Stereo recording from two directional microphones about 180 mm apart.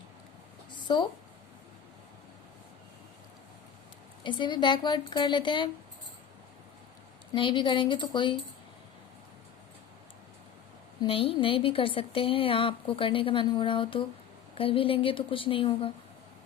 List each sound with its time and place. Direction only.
0.7 s a sound: 25° left (ahead or behind)
4.2 s speech: 25° left (ahead or behind)
7.3 s speech: 25° left (ahead or behind)
11.0 s speech: 30° left (ahead or behind)